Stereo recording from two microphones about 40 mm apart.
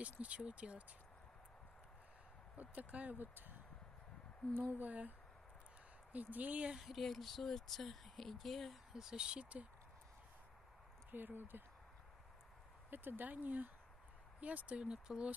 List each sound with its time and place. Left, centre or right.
0.0 s speech: right
2.5 s speech: right
3.2 s speech: right
4.6 s speech: right
6.1 s speech: right
6.7 s speech: centre
7.0 s speech: centre
8.9 s speech: centre
11.1 s speech: right
12.9 s speech: right
14.4 s speech: right
15.1 s speech: centre